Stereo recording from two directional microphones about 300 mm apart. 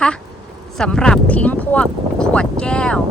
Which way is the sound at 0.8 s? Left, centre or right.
Centre.